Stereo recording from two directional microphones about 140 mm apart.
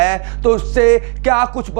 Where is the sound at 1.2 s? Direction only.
20° right (ahead or behind).